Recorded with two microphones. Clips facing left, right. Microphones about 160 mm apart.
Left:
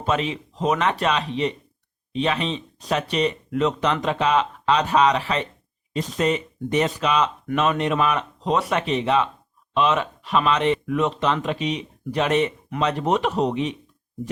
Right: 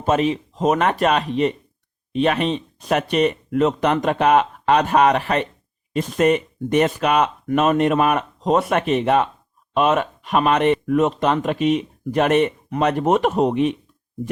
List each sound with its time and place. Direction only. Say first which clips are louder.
0.0 s speech: right 5 dB; 45° right (ahead or behind)